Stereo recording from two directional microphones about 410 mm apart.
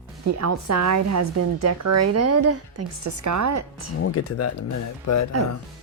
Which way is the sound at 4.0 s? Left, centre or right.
Left.